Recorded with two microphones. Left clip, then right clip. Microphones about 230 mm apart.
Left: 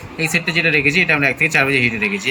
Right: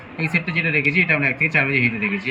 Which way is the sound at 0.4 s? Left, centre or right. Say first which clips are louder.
Left 5 dB; centre.